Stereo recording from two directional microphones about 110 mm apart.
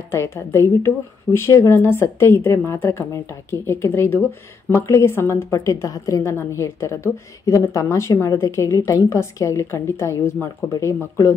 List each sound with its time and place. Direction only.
0.1 s a woman's voice: 20° left (ahead or behind)